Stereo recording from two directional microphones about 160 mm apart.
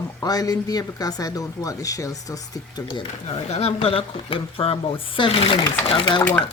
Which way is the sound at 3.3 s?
40° left (ahead or behind).